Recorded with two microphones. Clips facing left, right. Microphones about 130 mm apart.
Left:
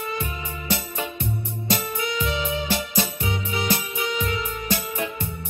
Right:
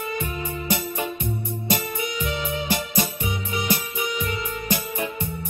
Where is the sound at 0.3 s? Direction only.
45° right (ahead or behind).